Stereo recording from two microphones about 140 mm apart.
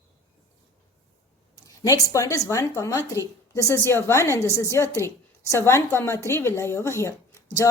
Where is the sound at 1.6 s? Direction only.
25° left (ahead or behind).